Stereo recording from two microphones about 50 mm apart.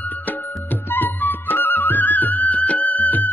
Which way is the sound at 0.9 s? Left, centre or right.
Left.